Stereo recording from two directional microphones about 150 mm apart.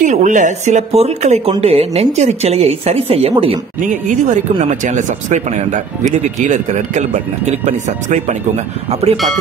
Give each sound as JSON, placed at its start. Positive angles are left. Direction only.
{"t": 0.0, "sound": "speech", "side_deg": -55}
{"t": 3.8, "sound": "speech", "side_deg": -55}
{"t": 9.1, "sound": "speech", "side_deg": 0}